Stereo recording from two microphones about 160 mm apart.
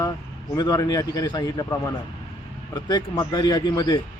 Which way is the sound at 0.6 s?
25° left (ahead or behind).